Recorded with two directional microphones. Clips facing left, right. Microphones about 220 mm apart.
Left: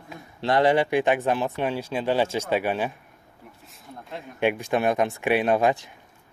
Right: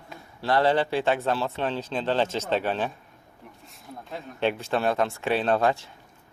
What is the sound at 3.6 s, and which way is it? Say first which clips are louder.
Speech: right 1 dB; centre (ahead or behind).